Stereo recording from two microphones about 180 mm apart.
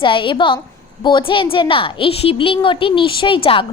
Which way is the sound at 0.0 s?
30° left (ahead or behind).